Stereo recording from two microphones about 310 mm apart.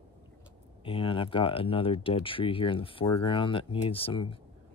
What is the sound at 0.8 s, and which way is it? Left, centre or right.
Speech, centre.